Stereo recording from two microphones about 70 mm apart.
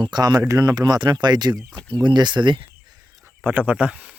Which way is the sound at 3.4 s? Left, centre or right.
Right.